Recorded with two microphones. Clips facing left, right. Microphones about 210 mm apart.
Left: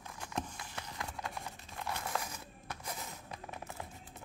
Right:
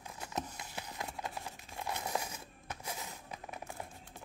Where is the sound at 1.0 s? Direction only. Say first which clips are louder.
Even; 20° right (ahead or behind).